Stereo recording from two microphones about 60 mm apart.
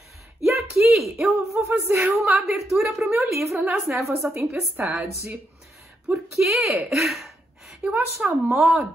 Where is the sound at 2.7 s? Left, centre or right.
Centre.